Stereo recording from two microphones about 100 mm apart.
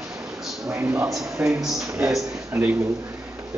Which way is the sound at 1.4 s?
15° right (ahead or behind).